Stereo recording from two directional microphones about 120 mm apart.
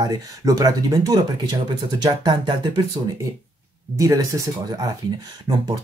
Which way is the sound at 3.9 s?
25° right (ahead or behind).